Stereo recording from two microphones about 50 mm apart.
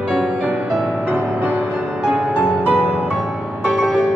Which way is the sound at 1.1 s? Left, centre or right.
Right.